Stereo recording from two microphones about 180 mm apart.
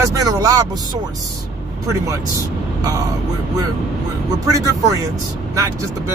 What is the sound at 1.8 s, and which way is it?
Speech, 20° right (ahead or behind).